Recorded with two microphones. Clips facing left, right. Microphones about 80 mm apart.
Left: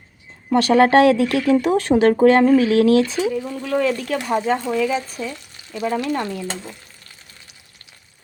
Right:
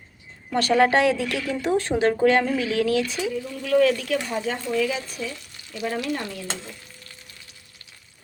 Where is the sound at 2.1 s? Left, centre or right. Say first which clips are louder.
Left 7 dB; left.